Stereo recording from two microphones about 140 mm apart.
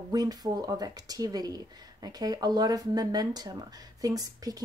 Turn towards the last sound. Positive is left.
turn(degrees=-25)  # may be behind; listen again after turning